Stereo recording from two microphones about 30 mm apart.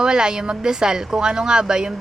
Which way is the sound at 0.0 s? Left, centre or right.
Right.